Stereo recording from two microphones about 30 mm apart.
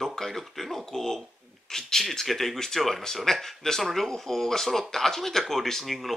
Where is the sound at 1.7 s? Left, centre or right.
Centre.